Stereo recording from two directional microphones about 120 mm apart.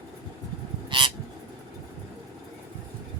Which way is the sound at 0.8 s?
40° right (ahead or behind).